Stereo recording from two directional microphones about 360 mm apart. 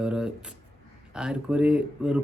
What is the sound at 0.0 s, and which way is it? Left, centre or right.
Speech, centre.